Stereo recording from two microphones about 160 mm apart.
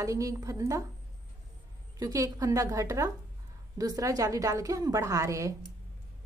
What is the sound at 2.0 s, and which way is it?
A woman's voice, 20° right (ahead or behind).